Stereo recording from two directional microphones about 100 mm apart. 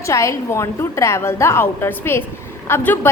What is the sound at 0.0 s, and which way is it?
A woman's voice, 30° left (ahead or behind).